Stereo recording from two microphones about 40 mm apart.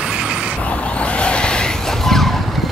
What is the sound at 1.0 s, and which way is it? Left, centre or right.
Vehicle, left.